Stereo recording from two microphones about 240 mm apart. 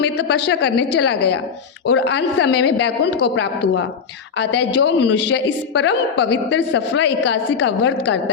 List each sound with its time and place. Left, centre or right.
0.0 s a woman's voice: left